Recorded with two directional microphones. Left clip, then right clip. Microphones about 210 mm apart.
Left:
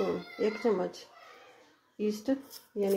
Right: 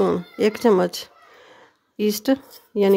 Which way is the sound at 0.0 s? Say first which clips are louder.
Right 11 dB; 50° right (ahead or behind).